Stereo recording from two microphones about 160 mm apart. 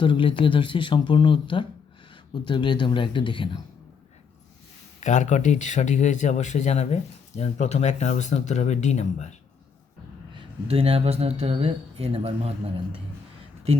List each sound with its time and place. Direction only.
0.0 s speech: 30° left (ahead or behind)
4.9 s speech: 50° left (ahead or behind)
10.3 s speech: 35° right (ahead or behind)